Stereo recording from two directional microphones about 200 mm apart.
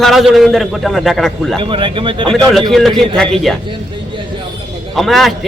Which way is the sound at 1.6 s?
25° right (ahead or behind).